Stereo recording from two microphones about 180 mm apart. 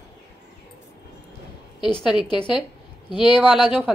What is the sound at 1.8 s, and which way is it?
Speech, centre (ahead or behind).